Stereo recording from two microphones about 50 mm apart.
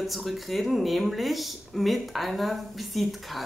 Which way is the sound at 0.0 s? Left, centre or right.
Centre.